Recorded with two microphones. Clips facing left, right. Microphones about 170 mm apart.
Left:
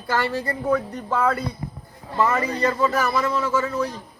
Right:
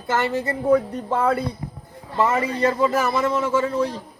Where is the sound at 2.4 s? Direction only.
25° right (ahead or behind).